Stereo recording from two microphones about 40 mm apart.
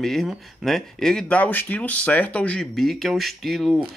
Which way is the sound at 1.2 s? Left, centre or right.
Left.